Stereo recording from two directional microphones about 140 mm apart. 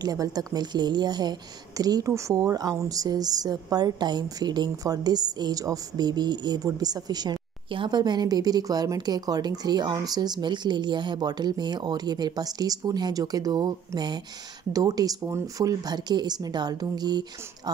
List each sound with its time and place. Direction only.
0.0 s speech: 25° right (ahead or behind)